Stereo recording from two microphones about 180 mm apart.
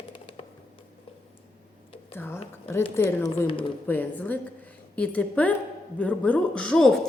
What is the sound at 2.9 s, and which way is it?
A woman's voice, 15° left (ahead or behind).